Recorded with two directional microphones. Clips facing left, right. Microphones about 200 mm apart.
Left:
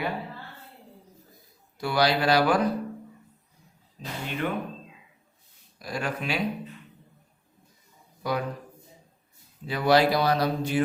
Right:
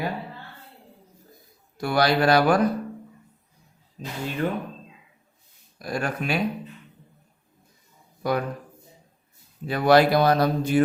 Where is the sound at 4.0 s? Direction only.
45° right (ahead or behind).